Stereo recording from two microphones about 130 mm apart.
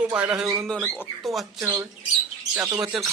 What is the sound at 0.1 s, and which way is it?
Speech, 10° right (ahead or behind).